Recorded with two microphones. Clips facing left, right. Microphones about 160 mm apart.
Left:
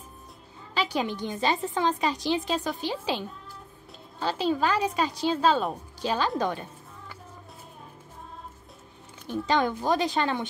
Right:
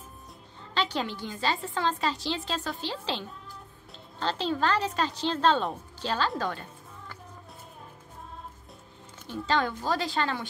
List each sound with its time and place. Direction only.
0.7 s a woman's voice: 10° left (ahead or behind)
9.5 s speech: 15° left (ahead or behind)